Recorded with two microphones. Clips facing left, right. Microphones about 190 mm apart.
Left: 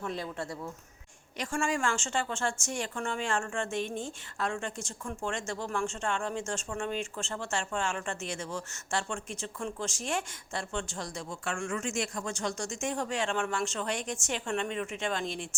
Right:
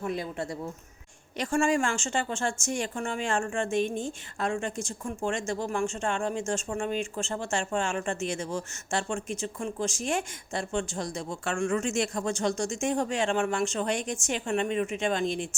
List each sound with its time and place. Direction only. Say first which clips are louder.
0.0 s a woman's voice: right 4 dB; 10° right (ahead or behind)